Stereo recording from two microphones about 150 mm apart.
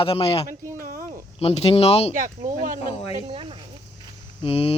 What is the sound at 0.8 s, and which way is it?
Speech, 70° right (ahead or behind).